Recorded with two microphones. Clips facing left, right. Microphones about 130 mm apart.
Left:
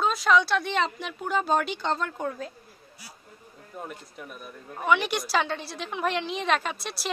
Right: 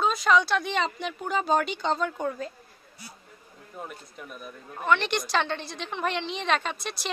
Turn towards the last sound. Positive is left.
turn(degrees=5)  # may be behind; listen again after turning